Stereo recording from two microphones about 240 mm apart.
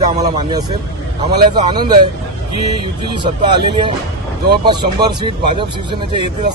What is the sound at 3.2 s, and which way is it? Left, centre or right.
Speech, centre.